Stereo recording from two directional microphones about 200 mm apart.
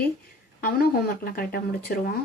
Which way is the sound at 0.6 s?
45° left (ahead or behind).